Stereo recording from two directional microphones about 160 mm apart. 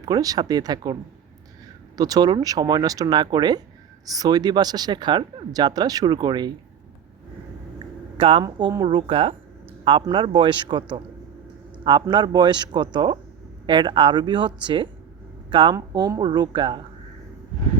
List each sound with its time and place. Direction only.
0.0 s speech: 20° right (ahead or behind)
2.0 s speech: 25° right (ahead or behind)
8.2 s speech: 35° right (ahead or behind)
12.1 s speech: 30° right (ahead or behind)